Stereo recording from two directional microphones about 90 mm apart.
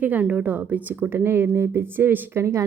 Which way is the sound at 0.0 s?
15° right (ahead or behind).